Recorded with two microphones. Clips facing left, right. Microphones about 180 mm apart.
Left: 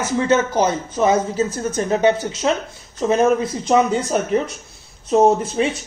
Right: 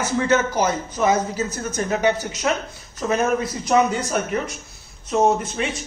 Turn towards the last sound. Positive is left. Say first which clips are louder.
# left 4 dB
turn(degrees=30)  # may be behind; listen again after turning